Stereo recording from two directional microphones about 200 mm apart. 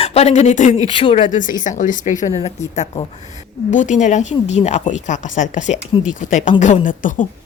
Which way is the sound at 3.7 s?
35° left (ahead or behind).